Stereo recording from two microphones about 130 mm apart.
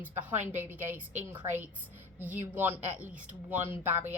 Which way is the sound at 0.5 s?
15° right (ahead or behind).